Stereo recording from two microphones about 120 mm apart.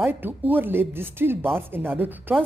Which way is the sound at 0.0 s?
15° right (ahead or behind).